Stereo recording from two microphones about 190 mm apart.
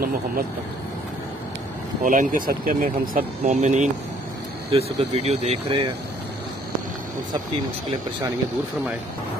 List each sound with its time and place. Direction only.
2.0 s speech: 45° right (ahead or behind)